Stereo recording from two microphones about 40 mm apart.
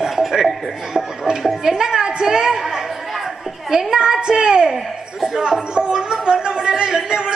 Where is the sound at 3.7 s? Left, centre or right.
Centre.